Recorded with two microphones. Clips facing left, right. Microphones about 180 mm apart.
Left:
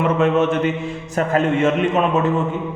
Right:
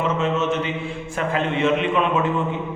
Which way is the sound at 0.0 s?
60° left (ahead or behind).